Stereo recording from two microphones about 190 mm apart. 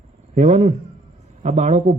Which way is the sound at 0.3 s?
35° right (ahead or behind).